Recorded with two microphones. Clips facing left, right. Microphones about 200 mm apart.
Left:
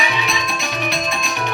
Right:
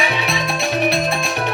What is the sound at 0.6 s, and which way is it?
Music, 60° right (ahead or behind).